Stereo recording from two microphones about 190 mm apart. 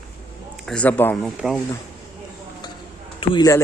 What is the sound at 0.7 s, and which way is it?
Speech, 5° left (ahead or behind).